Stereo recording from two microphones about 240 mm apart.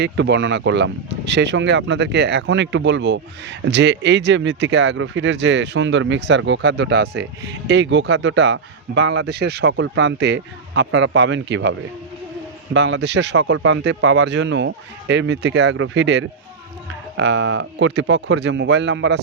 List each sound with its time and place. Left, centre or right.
0.0 s speech: right
12.7 s speech: right